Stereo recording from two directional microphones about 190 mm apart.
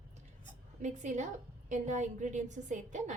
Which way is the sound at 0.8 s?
40° right (ahead or behind).